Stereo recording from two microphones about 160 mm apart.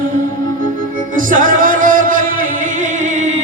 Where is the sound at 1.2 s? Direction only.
55° right (ahead or behind).